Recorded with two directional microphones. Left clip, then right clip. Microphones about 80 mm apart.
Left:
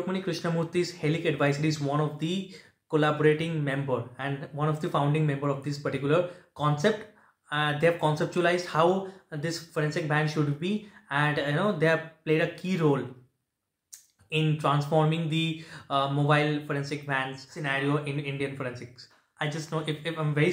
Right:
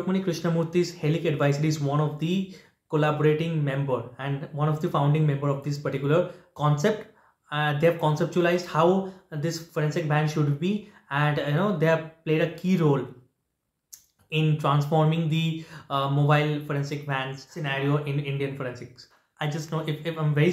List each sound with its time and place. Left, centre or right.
0.1 s speech: right
1.8 s speech: centre; by 6.9 s right
7.4 s speech: right
14.3 s speech: right